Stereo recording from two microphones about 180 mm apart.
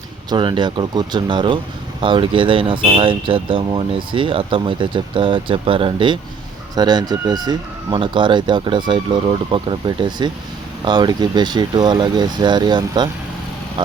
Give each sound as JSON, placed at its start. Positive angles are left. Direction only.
{"t": 0.3, "sound": "speech", "side_deg": -25}